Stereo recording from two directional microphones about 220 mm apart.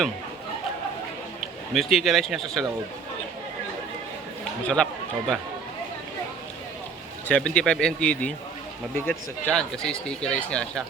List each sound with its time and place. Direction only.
1.7 s speech: centre (ahead or behind)
4.6 s speech: 5° left (ahead or behind)
7.3 s speech: 5° left (ahead or behind)